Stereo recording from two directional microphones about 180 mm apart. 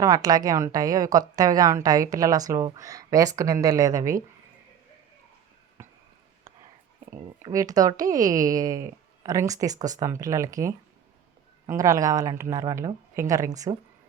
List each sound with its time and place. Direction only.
0.0 s a woman's voice: 20° right (ahead or behind)
5.8 s a sound: 15° right (ahead or behind)
7.2 s a woman's voice: 25° right (ahead or behind)